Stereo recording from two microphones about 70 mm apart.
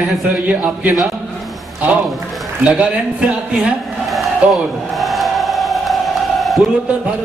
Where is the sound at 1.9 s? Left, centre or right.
Centre.